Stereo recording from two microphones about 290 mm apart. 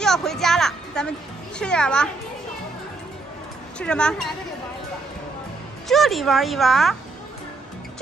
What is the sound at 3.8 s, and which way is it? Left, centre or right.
Speech, centre.